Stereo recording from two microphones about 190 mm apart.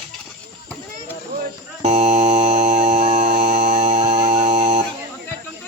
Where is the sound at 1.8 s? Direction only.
35° right (ahead or behind).